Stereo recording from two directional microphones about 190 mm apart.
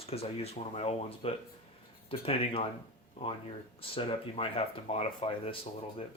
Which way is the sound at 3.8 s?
30° left (ahead or behind).